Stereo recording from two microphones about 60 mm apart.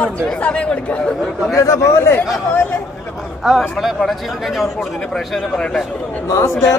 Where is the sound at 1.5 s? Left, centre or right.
Left.